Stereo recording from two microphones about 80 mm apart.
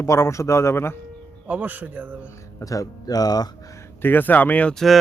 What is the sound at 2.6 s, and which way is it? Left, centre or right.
Speech, left.